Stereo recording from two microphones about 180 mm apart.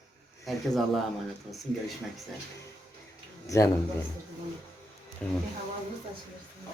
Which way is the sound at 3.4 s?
20° left (ahead or behind).